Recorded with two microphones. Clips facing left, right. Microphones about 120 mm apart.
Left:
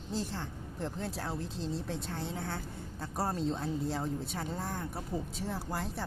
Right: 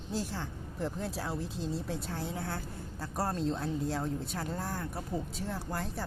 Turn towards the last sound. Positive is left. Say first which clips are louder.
# even
turn(degrees=0)  # may be behind; listen again after turning